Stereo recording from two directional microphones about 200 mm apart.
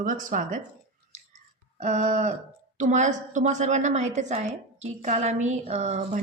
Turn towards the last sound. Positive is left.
turn(degrees=-35)  # may be behind; listen again after turning